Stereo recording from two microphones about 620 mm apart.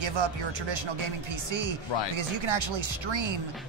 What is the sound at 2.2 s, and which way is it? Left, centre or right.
Speech, right.